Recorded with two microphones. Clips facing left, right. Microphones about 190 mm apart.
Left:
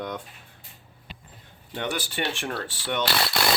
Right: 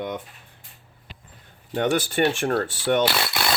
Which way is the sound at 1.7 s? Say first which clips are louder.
Right 8 dB; 45° right (ahead or behind).